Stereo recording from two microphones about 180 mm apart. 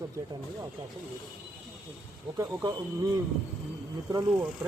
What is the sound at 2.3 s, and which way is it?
Speech, 20° right (ahead or behind).